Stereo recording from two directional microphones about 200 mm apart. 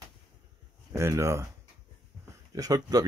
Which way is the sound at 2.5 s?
20° right (ahead or behind).